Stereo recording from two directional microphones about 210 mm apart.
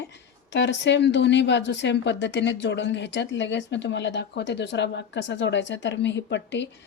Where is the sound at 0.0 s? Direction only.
55° left (ahead or behind).